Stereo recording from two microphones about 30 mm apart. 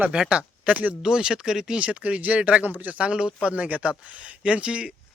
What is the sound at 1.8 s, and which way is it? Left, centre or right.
Speech, right.